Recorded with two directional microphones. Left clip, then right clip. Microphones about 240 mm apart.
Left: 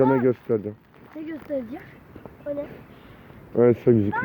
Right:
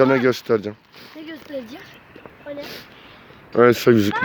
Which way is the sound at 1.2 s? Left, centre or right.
Centre.